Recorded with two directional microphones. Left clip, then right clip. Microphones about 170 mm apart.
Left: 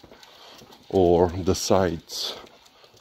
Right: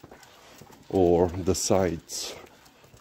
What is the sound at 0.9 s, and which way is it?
Speech, 20° right (ahead or behind).